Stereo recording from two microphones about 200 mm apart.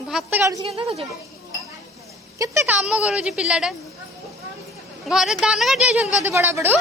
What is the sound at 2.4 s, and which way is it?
Speech, 15° right (ahead or behind).